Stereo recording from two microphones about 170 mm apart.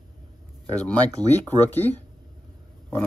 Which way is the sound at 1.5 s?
10° left (ahead or behind).